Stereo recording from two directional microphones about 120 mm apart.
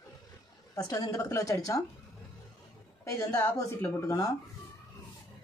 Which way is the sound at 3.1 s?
25° left (ahead or behind).